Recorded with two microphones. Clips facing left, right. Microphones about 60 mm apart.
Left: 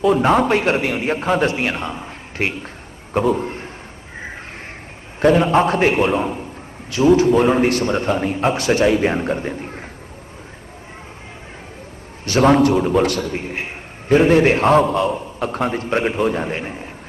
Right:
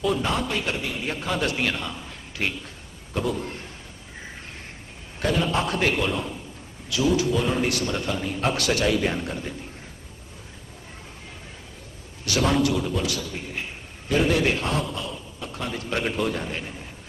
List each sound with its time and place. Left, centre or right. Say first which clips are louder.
0.0 s a man's voice: left 9 dB; left
0.3 s a man's voice: left 11 dB; left
1.0 s a man's voice: left 7 dB; left
5.2 s a man's voice: left 10 dB; left
8.4 s a man's voice: left 5 dB; left
12.2 s a man's voice: left 9 dB; left